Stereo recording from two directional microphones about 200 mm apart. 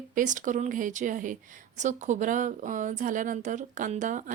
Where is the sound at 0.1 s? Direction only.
40° right (ahead or behind).